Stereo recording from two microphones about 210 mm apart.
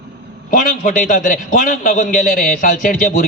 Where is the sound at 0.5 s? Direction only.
40° left (ahead or behind).